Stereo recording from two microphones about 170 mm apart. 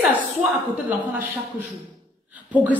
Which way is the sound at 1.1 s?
10° right (ahead or behind).